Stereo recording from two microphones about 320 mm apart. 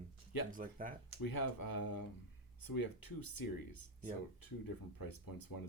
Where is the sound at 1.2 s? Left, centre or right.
Left.